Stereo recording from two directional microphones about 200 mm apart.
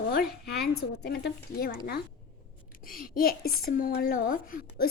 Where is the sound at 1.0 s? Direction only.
55° left (ahead or behind).